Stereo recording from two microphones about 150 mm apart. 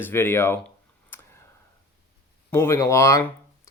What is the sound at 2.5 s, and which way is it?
Speech, 15° left (ahead or behind).